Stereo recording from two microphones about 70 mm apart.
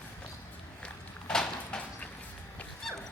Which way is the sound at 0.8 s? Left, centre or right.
Centre.